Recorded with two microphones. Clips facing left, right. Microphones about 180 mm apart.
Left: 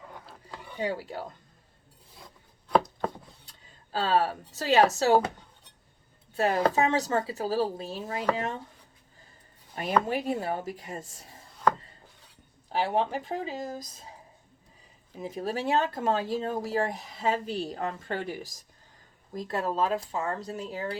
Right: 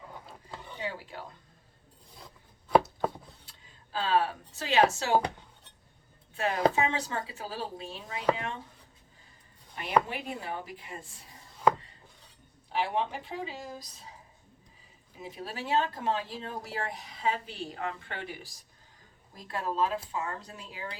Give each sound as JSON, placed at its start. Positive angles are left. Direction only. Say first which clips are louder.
{"t": 0.8, "sound": "speech", "louder": "left 7 dB", "side_deg": 40}
{"t": 2.1, "sound": "chopping", "louder": "even", "side_deg": 0}
{"t": 3.9, "sound": "speech", "louder": "left 2 dB", "side_deg": 40}
{"t": 6.3, "sound": "speech", "louder": "left 2 dB", "side_deg": 40}
{"t": 10.1, "sound": "speech", "louder": "left 8 dB", "side_deg": 40}
{"t": 12.6, "sound": "speech", "louder": "left 3 dB", "side_deg": 40}
{"t": 15.2, "sound": "speech", "louder": "left 8 dB", "side_deg": 45}